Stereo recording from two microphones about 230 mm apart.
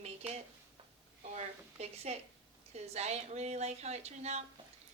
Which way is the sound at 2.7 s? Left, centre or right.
Right.